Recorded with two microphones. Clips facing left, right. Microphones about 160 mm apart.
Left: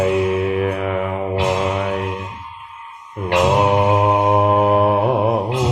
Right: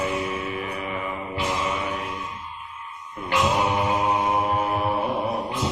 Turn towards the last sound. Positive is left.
turn(degrees=75)  # may be behind; listen again after turning